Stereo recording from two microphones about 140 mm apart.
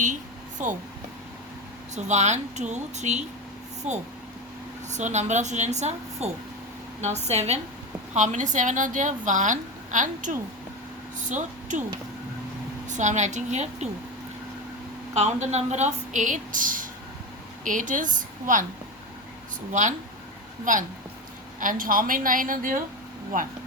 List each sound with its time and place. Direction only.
0.6 s a woman's voice: 60° right (ahead or behind)
2.0 s a woman's voice: 55° right (ahead or behind)
8.1 s a woman's voice: 60° right (ahead or behind)
12.9 s a woman's voice: 60° right (ahead or behind)
15.1 s a woman's voice: 50° right (ahead or behind)
19.7 s a woman's voice: 65° right (ahead or behind)
21.6 s a woman's voice: 75° right (ahead or behind)